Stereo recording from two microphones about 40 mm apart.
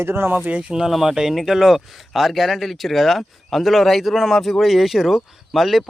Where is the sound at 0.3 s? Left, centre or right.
Right.